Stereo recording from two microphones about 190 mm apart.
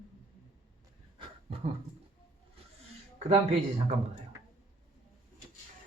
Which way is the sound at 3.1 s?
35° right (ahead or behind).